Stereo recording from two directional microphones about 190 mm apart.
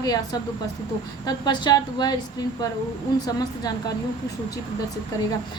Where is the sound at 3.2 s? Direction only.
20° left (ahead or behind).